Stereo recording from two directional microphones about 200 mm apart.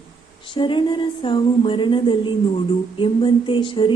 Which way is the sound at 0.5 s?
25° left (ahead or behind).